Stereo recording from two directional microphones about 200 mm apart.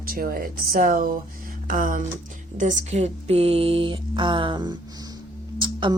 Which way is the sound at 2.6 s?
35° right (ahead or behind).